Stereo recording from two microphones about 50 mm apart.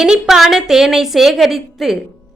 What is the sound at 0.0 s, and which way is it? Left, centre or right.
A woman's voice, centre.